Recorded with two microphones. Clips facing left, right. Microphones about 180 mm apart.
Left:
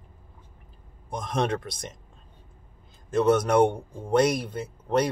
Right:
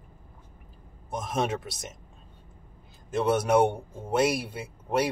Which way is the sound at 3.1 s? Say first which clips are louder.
Left 2 dB; 5° right (ahead or behind).